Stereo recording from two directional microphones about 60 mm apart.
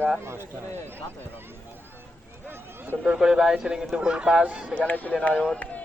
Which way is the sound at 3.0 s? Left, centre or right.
Centre.